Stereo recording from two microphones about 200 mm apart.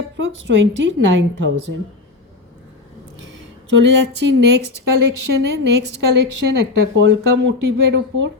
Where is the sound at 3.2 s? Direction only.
70° right (ahead or behind).